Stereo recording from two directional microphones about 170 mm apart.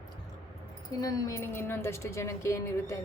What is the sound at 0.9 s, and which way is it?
Speech, 20° left (ahead or behind).